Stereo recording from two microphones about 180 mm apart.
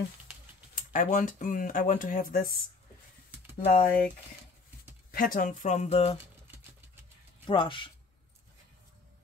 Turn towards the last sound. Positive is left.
turn(degrees=30)  # may be behind; listen again after turning